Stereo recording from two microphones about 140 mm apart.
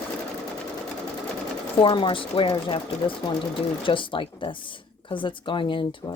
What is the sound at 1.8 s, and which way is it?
Speech, 35° left (ahead or behind).